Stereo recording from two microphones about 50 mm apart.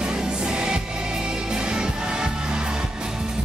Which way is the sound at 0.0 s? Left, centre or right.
Centre.